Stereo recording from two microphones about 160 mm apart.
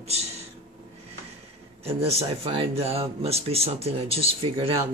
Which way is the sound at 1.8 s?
40° right (ahead or behind).